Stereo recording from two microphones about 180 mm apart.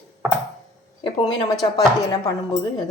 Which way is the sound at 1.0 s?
25° left (ahead or behind).